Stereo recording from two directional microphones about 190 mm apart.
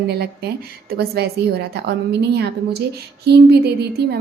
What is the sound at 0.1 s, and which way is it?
A woman's voice, 55° right (ahead or behind).